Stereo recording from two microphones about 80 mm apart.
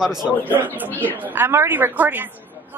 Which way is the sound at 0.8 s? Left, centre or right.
Left.